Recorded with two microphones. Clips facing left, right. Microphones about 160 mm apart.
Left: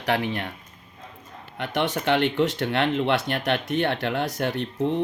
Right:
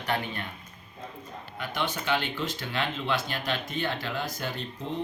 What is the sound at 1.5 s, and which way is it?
Speech, 70° left (ahead or behind).